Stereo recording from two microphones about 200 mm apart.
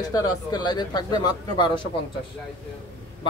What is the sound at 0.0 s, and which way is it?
Speech, 20° left (ahead or behind).